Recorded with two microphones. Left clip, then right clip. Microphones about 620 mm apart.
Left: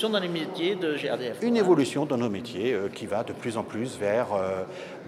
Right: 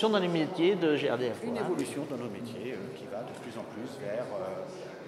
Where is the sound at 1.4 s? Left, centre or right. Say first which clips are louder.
Left 10 dB; left.